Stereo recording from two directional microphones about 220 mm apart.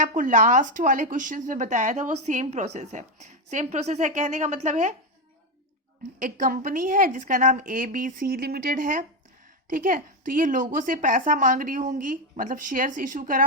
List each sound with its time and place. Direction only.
0.0 s a woman's voice: 35° right (ahead or behind)
6.1 s a woman's voice: 35° right (ahead or behind)